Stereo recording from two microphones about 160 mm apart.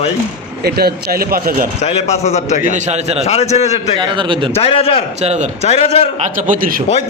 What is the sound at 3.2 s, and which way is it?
Speech, 45° left (ahead or behind).